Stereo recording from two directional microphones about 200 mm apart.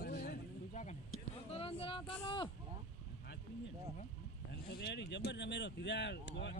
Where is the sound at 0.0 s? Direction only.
50° left (ahead or behind); by 2.0 s 25° left (ahead or behind).